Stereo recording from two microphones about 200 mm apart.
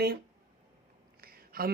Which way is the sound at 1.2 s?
50° right (ahead or behind).